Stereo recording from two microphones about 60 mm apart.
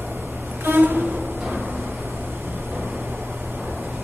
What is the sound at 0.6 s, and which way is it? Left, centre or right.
Vehicle, right.